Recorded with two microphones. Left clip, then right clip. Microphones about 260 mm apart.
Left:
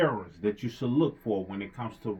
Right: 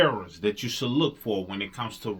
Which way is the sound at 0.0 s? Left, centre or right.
Centre.